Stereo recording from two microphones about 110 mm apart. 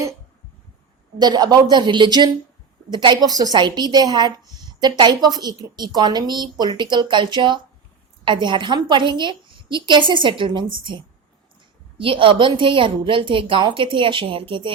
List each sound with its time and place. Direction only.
1.2 s a woman's voice: 40° right (ahead or behind)